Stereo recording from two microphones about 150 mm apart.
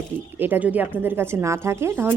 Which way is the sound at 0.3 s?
15° right (ahead or behind).